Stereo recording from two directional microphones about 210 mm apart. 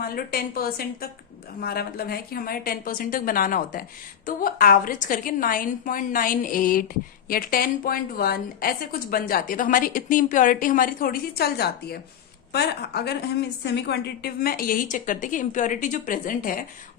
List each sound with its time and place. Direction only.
0.0 s a woman's voice: 45° left (ahead or behind)